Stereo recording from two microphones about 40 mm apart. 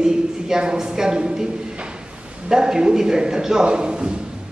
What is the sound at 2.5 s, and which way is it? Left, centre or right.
A woman's voice, centre.